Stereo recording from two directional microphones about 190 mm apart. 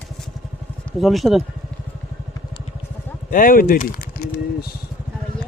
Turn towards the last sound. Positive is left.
turn(degrees=55)  # may be behind; listen again after turning